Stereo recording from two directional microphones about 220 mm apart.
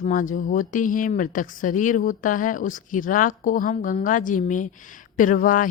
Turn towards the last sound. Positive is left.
turn(degrees=35)  # may be behind; listen again after turning